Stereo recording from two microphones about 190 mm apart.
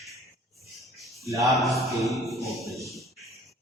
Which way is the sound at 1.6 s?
Centre (ahead or behind).